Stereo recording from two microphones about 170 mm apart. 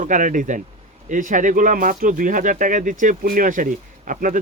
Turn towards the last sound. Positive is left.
turn(degrees=-50)  # may be behind; listen again after turning